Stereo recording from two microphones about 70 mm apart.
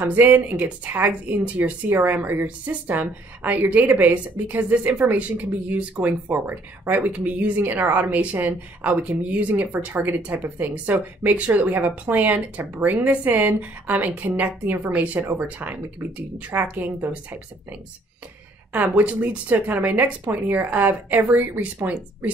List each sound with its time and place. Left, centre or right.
0.0 s speech: right